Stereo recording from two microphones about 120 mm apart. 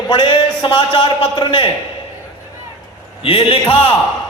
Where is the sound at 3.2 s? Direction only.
50° left (ahead or behind).